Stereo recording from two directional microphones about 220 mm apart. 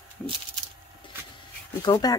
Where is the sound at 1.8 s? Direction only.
15° left (ahead or behind).